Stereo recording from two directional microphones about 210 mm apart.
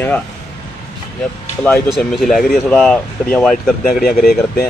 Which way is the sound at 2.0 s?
Centre (ahead or behind).